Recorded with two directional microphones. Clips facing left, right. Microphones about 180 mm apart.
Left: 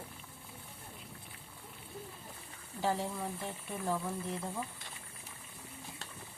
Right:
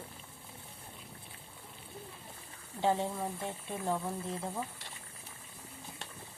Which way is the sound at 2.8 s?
20° right (ahead or behind).